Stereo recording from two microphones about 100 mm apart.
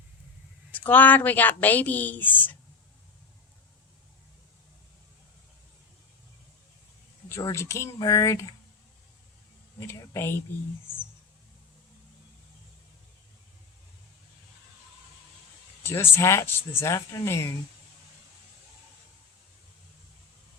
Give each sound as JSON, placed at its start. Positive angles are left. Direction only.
{"t": 0.7, "sound": "speech", "side_deg": 15}
{"t": 7.4, "sound": "speech", "side_deg": 30}
{"t": 9.8, "sound": "speech", "side_deg": 25}
{"t": 15.8, "sound": "speech", "side_deg": 25}